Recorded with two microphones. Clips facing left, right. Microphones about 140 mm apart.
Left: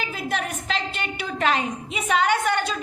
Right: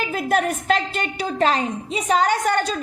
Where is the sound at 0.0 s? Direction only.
50° right (ahead or behind).